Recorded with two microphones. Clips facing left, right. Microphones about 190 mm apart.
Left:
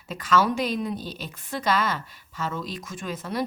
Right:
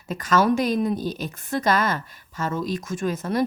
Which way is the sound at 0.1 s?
45° right (ahead or behind).